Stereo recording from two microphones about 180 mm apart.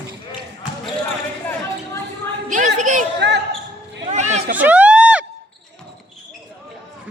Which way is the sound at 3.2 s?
70° right (ahead or behind).